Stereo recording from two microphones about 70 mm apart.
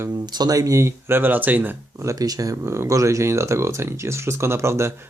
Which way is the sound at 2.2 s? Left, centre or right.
Right.